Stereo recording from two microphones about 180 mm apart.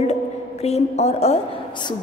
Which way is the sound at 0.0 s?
35° left (ahead or behind).